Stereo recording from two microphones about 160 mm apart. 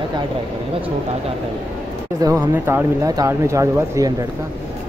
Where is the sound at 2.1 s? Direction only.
20° right (ahead or behind).